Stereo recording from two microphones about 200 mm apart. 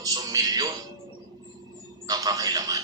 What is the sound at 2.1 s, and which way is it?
Speech, 20° right (ahead or behind).